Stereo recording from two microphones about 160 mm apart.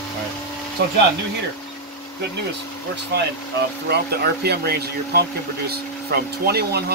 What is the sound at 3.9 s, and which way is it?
Speech, 85° right.